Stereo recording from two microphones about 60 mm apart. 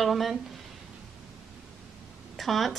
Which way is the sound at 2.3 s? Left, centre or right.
Centre.